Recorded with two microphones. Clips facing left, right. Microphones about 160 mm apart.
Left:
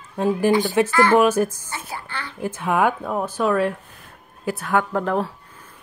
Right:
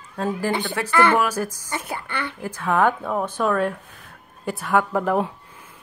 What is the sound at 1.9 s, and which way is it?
Speech, 60° right (ahead or behind).